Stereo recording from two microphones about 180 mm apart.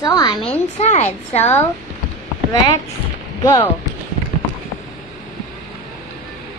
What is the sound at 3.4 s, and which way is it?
Speech, 15° left (ahead or behind).